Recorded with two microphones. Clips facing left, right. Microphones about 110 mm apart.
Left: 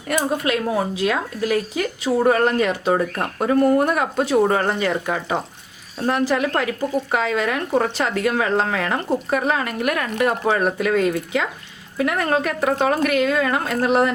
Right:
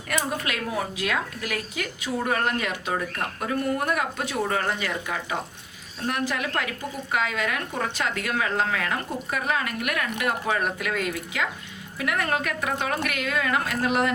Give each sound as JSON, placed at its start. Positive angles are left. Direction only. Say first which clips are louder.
{"t": 0.1, "sound": "speech", "louder": "left 7 dB", "side_deg": 30}